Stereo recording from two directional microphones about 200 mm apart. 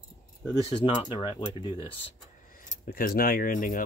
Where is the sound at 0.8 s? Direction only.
25° left (ahead or behind).